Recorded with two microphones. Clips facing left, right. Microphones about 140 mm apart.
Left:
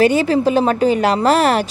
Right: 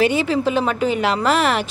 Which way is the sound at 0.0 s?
40° left (ahead or behind).